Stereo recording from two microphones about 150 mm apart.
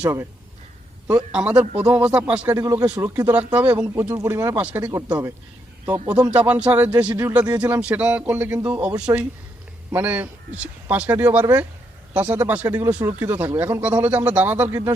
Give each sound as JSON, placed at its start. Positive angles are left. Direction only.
{"t": 0.0, "sound": "speech", "side_deg": -15}
{"t": 1.3, "sound": "speech", "side_deg": -5}
{"t": 2.5, "sound": "speech", "side_deg": -20}
{"t": 6.3, "sound": "speech", "side_deg": -10}